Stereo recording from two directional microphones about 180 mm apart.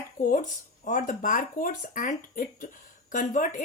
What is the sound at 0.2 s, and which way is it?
A woman's voice, 50° left (ahead or behind).